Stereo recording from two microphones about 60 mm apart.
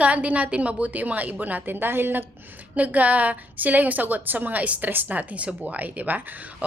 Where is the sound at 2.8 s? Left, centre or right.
Right.